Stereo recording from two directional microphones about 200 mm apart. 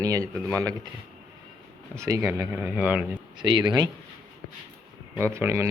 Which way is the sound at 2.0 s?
15° right (ahead or behind).